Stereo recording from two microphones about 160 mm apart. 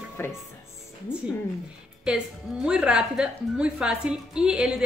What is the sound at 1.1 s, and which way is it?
A woman's voice, 5° right (ahead or behind).